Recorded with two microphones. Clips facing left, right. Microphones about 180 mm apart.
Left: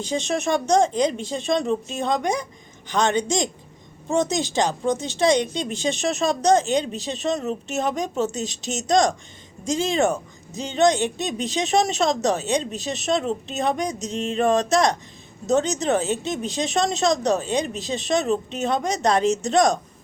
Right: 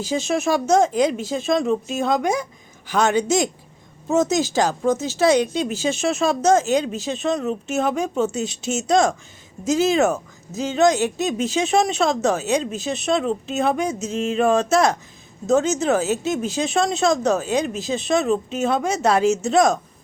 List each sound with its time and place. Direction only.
0.0 s speech: 5° right (ahead or behind)
8.3 s a woman's voice: 40° left (ahead or behind)
8.9 s speech: centre (ahead or behind)